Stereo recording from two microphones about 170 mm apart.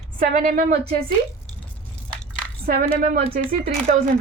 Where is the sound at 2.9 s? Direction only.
60° right (ahead or behind).